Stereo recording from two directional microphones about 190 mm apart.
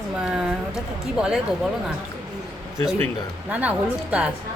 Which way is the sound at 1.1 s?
5° right (ahead or behind).